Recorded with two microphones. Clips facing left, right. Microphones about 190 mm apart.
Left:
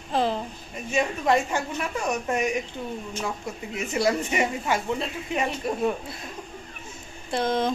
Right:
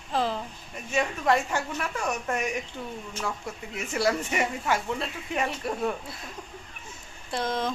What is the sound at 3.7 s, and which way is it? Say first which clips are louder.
Speech: left 2 dB; 20° left (ahead or behind).